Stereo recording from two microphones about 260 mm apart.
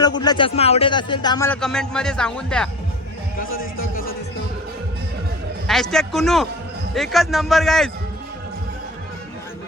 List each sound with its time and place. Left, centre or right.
0.0 s speech: centre
3.3 s music: left
5.6 s a man's voice: centre